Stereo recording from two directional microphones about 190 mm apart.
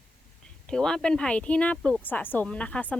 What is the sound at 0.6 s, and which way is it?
Speech, 5° left (ahead or behind).